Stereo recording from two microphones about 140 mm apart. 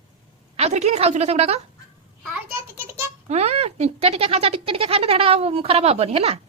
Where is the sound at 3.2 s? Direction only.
50° right (ahead or behind).